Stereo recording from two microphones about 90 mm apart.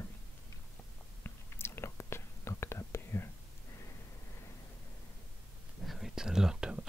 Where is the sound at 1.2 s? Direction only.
30° left (ahead or behind).